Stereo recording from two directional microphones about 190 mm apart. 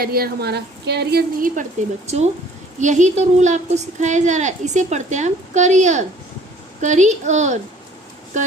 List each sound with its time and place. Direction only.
0.0 s a woman's voice: 50° right (ahead or behind)
2.0 s speech: 35° right (ahead or behind)